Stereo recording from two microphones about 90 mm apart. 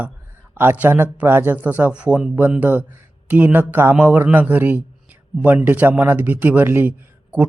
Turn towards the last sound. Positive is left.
turn(degrees=-15)  # may be behind; listen again after turning